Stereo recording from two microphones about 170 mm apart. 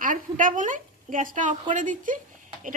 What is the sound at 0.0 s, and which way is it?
A woman's voice, 50° right (ahead or behind).